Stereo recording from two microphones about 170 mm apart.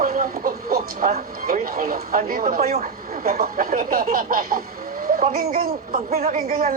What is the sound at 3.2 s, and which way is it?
Speech, 60° right (ahead or behind).